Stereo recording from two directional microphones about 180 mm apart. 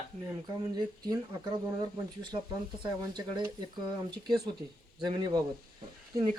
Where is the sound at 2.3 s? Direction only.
30° right (ahead or behind).